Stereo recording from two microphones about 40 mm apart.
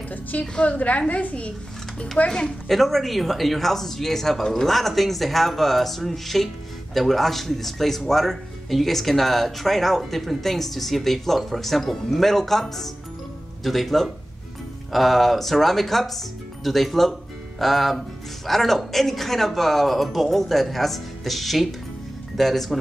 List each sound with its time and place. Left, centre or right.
0.1 s a sound: left
0.6 s a woman's voice: left
2.2 s a woman's voice: left
2.7 s speech: centre